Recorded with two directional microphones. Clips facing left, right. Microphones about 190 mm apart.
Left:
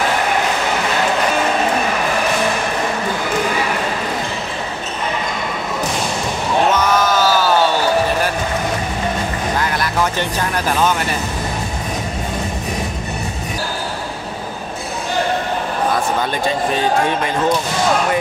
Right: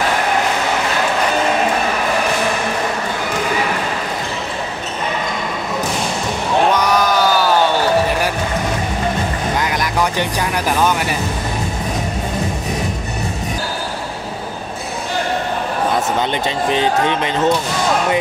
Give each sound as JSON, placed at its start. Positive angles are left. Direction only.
{"t": 6.7, "sound": "a sound", "side_deg": -15}
{"t": 9.6, "sound": "vehicle", "side_deg": -15}
{"t": 16.2, "sound": "speech", "side_deg": -20}